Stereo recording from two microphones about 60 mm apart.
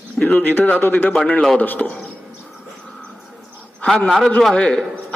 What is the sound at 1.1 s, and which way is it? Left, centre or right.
Speech, centre.